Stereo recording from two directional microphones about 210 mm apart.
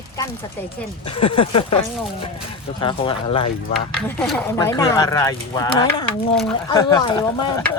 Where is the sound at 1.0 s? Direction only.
25° left (ahead or behind).